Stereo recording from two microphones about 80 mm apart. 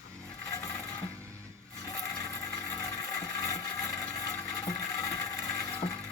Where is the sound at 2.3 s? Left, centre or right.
Left.